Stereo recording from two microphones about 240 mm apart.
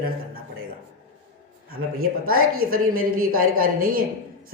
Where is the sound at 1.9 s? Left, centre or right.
Right.